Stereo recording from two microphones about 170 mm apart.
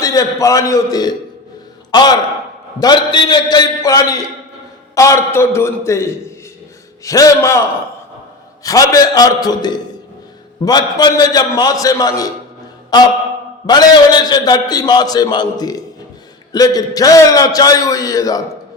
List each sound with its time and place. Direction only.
0.0 s a man's voice: 20° left (ahead or behind)
8.6 s a man's voice: 20° left (ahead or behind)